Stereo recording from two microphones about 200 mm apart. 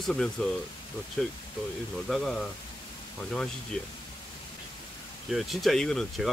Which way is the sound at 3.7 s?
5° left (ahead or behind).